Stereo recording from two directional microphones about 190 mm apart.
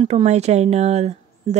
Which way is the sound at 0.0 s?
35° right (ahead or behind).